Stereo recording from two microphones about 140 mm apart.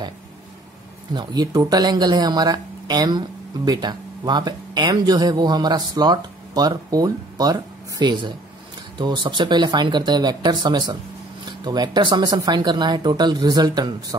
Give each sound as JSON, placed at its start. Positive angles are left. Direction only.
{"t": 1.1, "sound": "speech", "side_deg": -30}